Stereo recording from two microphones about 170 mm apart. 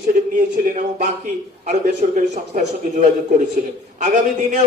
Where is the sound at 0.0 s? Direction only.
50° right (ahead or behind).